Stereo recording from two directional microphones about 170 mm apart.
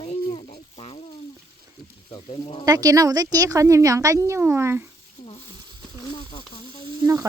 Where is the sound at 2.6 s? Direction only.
20° right (ahead or behind).